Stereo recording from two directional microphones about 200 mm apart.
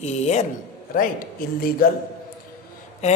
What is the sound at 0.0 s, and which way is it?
Speech, 35° left (ahead or behind).